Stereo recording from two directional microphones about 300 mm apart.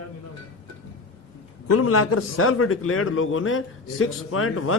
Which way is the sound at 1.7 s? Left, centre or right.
Left.